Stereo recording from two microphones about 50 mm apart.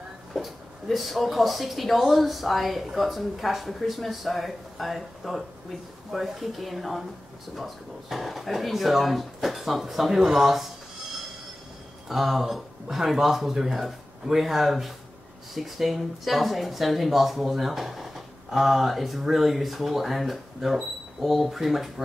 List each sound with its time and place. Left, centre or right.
0.3 s speech: centre
12.1 s speech: centre